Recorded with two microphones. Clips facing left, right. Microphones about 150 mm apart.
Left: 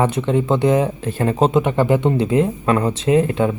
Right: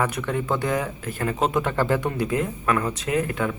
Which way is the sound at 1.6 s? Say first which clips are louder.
Left 6 dB; 20° left (ahead or behind).